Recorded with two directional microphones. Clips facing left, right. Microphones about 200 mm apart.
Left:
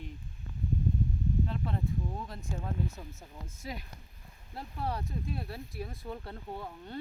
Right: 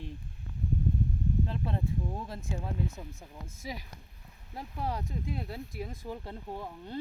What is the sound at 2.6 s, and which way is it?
Speech, 10° right (ahead or behind).